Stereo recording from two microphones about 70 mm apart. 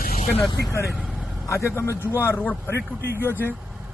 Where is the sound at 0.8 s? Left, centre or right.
Centre.